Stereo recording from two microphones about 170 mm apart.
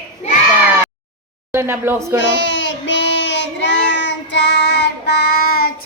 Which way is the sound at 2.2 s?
90° left.